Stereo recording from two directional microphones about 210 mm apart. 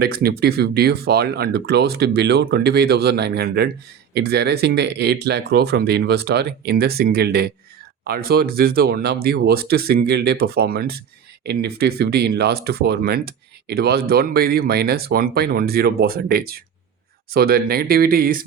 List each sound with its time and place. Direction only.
0.0 s speech: 45° right (ahead or behind)